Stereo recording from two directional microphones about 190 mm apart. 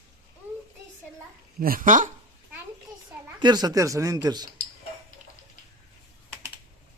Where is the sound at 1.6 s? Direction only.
45° right (ahead or behind).